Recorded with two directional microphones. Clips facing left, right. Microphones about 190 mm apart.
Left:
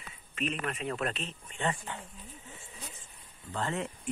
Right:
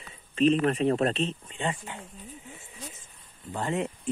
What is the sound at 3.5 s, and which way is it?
Speech, 15° right (ahead or behind).